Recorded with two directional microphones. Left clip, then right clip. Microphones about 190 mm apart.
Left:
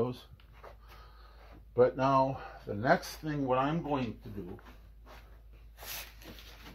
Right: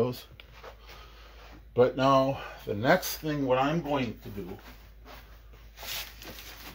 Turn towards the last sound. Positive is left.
turn(degrees=65)  # may be behind; listen again after turning